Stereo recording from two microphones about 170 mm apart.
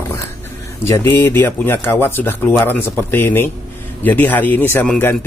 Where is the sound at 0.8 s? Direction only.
15° left (ahead or behind).